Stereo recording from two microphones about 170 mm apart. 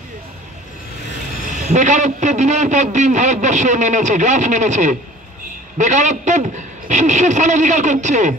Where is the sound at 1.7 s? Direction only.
45° right (ahead or behind).